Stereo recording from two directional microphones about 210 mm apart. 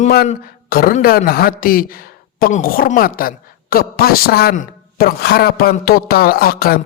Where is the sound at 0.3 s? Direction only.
45° left (ahead or behind).